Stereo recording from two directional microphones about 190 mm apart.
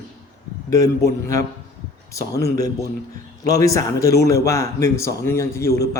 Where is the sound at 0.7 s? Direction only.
20° left (ahead or behind).